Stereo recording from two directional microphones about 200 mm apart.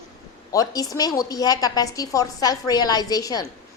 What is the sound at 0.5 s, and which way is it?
A woman's voice, 20° left (ahead or behind).